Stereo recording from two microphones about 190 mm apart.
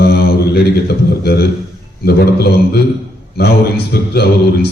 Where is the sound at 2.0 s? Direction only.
60° left (ahead or behind).